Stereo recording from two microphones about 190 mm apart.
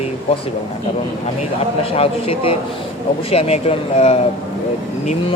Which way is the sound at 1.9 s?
30° left (ahead or behind).